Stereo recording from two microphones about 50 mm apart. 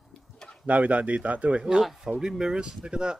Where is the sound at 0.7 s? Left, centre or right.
Right.